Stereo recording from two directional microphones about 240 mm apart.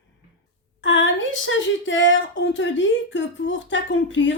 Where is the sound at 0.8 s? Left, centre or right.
Left.